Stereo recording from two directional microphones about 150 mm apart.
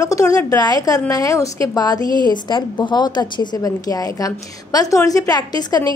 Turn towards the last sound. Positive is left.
turn(degrees=25)  # may be behind; listen again after turning